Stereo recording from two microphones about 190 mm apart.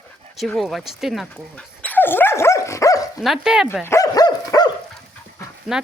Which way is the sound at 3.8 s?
15° left (ahead or behind).